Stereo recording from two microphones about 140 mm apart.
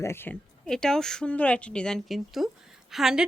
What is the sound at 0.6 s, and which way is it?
A woman's voice, 5° left (ahead or behind).